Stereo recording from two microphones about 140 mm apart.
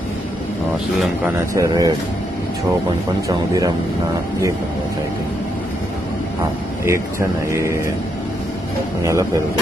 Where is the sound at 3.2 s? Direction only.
25° right (ahead or behind).